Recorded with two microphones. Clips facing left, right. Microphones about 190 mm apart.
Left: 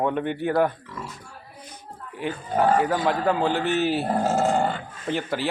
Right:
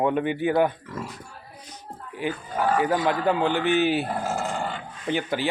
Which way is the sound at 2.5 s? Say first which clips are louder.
Left 4 dB; 35° left (ahead or behind).